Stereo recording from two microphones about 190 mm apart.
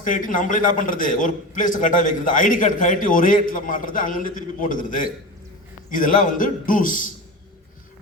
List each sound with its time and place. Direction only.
0.0 s a man's voice: 45° left (ahead or behind)